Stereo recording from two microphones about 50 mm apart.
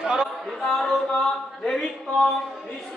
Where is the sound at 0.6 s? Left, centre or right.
Centre.